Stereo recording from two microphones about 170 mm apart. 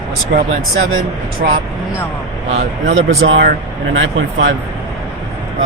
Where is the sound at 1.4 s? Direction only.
65° right (ahead or behind).